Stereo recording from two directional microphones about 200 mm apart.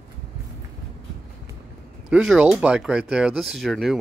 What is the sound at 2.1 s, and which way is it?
Speech, 5° right (ahead or behind).